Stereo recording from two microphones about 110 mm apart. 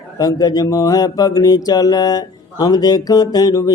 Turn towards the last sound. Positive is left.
turn(degrees=35)  # may be behind; listen again after turning